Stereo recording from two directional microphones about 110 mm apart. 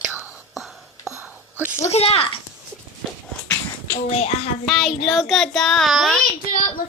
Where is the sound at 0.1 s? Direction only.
15° right (ahead or behind).